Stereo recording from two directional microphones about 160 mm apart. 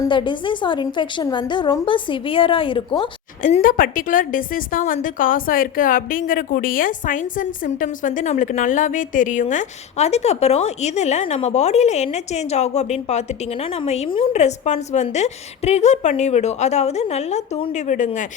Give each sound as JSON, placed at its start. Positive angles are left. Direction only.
{"t": 0.0, "sound": "a woman's voice", "side_deg": 30}
{"t": 3.6, "sound": "a woman's voice", "side_deg": 60}